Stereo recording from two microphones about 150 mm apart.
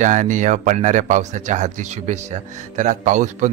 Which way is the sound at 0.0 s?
55° right (ahead or behind).